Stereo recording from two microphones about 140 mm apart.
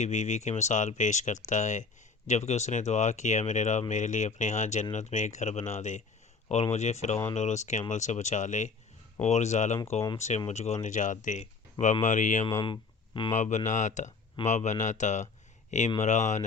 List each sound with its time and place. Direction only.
0.0 s speech: 60° left (ahead or behind)
10.8 s speech: 65° left (ahead or behind)
12.6 s speech: 35° left (ahead or behind)
13.3 s speech: 60° left (ahead or behind)